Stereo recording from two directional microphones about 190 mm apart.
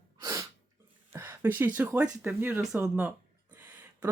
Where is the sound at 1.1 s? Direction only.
10° right (ahead or behind).